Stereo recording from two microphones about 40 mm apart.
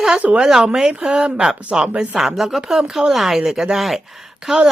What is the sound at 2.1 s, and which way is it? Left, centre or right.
A woman's voice, centre.